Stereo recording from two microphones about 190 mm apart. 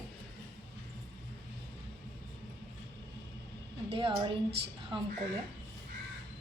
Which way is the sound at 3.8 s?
30° right (ahead or behind).